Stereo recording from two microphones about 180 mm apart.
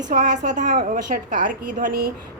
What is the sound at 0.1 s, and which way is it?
A woman's voice, 45° right (ahead or behind).